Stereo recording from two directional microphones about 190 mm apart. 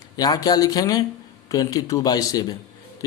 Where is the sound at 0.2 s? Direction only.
20° left (ahead or behind).